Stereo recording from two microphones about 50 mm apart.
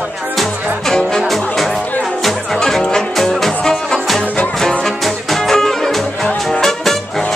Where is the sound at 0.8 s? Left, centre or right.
Centre.